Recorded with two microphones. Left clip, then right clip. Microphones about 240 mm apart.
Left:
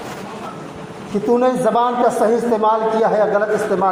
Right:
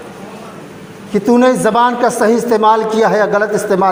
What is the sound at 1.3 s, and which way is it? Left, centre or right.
A man's voice, right.